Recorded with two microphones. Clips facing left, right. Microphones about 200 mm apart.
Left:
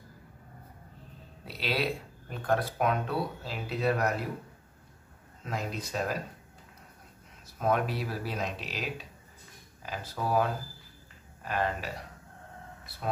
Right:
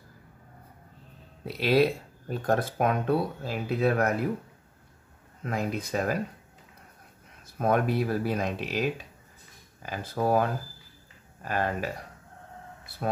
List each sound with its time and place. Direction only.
1.6 s speech: 45° right (ahead or behind)
5.4 s speech: 55° right (ahead or behind)
7.5 s speech: 55° right (ahead or behind)
11.4 s speech: 50° right (ahead or behind)